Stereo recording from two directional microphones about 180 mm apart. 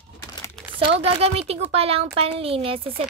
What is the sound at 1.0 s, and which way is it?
Speech, 35° right (ahead or behind).